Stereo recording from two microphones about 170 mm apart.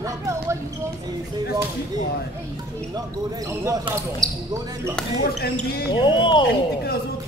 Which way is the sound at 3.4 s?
20° right (ahead or behind).